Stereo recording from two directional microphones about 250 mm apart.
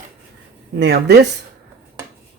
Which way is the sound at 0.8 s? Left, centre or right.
Right.